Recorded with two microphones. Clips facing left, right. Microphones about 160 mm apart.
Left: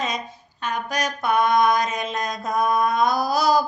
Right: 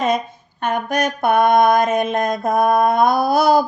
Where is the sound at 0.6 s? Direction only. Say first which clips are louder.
Right 6 dB; 55° right (ahead or behind).